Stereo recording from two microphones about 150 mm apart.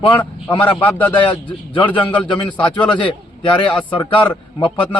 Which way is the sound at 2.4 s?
10° left (ahead or behind).